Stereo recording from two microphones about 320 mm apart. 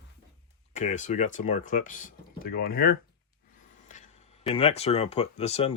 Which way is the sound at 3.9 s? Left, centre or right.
Centre.